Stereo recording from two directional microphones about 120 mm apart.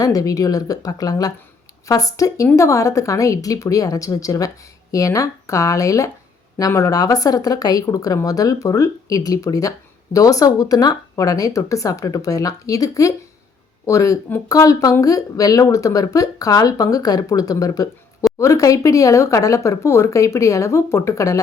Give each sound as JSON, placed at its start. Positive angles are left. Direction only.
{"t": 0.0, "sound": "speech", "side_deg": 30}